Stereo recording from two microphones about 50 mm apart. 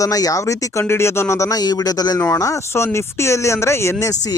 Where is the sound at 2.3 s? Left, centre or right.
Left.